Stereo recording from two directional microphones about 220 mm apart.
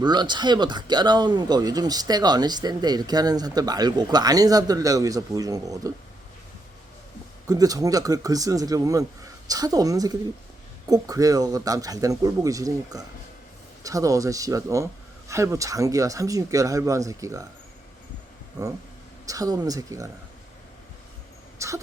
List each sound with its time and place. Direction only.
0.0 s speech: 20° right (ahead or behind)
7.4 s speech: 15° right (ahead or behind)
19.2 s speech: 15° right (ahead or behind)
21.6 s a sound: 15° right (ahead or behind)